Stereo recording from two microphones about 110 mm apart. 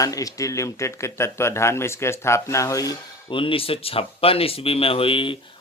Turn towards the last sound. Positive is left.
turn(degrees=50)  # may be behind; listen again after turning